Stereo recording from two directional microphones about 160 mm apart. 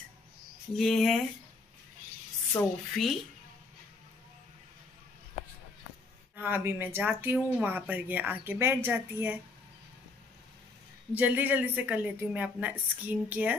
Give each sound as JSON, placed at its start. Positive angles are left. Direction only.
{"t": 0.7, "sound": "speech", "side_deg": 0}
{"t": 2.6, "sound": "speech", "side_deg": 20}
{"t": 3.0, "sound": "speech", "side_deg": 0}
{"t": 6.3, "sound": "a woman's voice", "side_deg": -10}
{"t": 11.1, "sound": "a woman's voice", "side_deg": -10}